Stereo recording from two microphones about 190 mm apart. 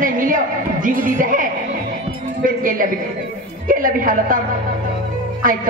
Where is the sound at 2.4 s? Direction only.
45° right (ahead or behind).